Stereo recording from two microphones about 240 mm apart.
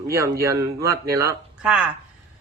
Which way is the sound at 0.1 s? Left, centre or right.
Centre.